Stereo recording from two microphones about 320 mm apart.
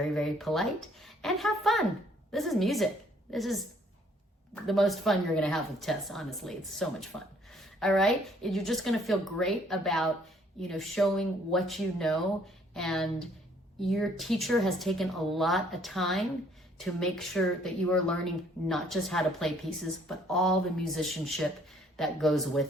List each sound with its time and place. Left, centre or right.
0.0 s a woman's voice: centre